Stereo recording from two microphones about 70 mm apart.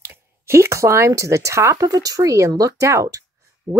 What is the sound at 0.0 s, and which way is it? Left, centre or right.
Speech, right.